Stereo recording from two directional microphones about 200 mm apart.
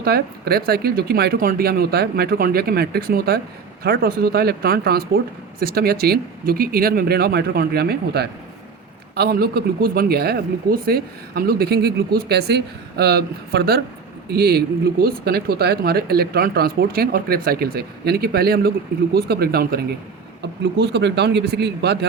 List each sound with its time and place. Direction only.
0.0 s speech: 50° right (ahead or behind)